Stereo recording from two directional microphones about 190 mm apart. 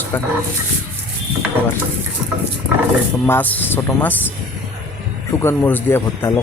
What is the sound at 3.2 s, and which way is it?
Speech, 10° left (ahead or behind).